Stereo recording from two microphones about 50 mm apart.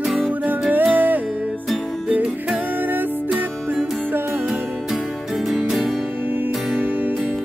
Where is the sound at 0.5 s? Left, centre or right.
Right.